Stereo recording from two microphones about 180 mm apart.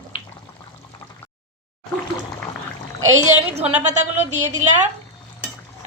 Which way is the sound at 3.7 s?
40° right (ahead or behind).